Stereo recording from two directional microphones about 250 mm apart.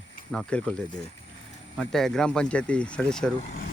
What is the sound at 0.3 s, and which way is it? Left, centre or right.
Speech, centre.